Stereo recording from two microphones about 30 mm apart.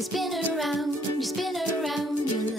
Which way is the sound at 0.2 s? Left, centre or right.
Centre.